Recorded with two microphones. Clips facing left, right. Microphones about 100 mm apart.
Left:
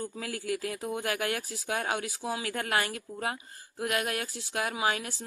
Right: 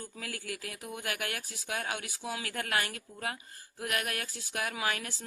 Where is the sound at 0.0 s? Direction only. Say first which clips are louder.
Left 6 dB; 30° left (ahead or behind).